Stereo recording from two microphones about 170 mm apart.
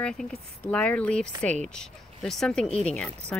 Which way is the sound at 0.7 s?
10° left (ahead or behind).